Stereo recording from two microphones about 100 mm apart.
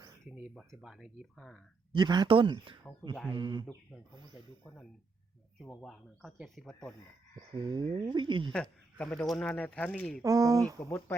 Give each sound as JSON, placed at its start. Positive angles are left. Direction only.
{"t": 0.3, "sound": "speech", "side_deg": -5}
{"t": 1.9, "sound": "speech", "side_deg": -50}
{"t": 5.8, "sound": "speech", "side_deg": 0}
{"t": 7.5, "sound": "speech", "side_deg": -45}
{"t": 8.5, "sound": "speech", "side_deg": 10}
{"t": 10.2, "sound": "speech", "side_deg": -35}
{"t": 10.8, "sound": "speech", "side_deg": 25}